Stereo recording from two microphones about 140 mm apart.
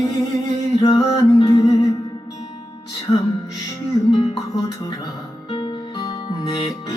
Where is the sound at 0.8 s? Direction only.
40° left (ahead or behind).